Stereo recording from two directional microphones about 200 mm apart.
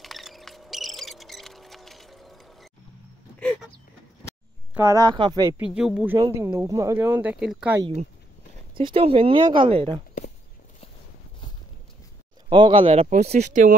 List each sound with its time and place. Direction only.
0.0 s a sound: centre (ahead or behind)
4.7 s speech: 15° right (ahead or behind)
5.6 s speech: 5° right (ahead or behind)
6.1 s speech: 15° right (ahead or behind)
8.7 s speech: 25° right (ahead or behind)
12.4 s speech: 25° right (ahead or behind)